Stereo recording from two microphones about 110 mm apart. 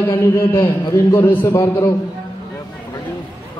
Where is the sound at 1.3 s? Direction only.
20° left (ahead or behind).